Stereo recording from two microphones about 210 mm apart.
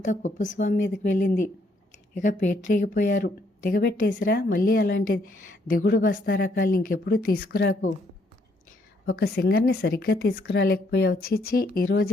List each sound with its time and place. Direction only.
0.0 s a woman's voice: 35° left (ahead or behind)
9.0 s speech: 50° left (ahead or behind)